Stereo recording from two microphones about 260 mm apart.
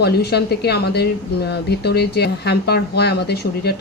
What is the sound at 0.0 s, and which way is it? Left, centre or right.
Speech, left.